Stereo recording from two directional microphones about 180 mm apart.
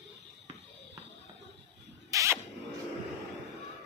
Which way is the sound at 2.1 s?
15° right (ahead or behind).